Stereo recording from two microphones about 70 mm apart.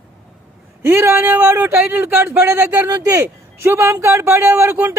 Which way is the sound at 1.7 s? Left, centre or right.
Right.